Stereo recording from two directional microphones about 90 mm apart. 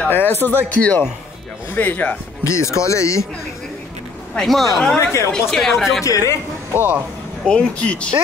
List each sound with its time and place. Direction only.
0.1 s speech: 25° left (ahead or behind)
2.4 s a man's voice: 35° left (ahead or behind)
4.4 s speech: centre (ahead or behind)
6.0 s a man's voice: 40° left (ahead or behind)
6.7 s speech: 20° right (ahead or behind)
7.4 s speech: 10° left (ahead or behind)